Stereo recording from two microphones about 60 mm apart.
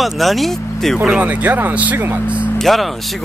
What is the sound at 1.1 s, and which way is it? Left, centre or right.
Speech, right.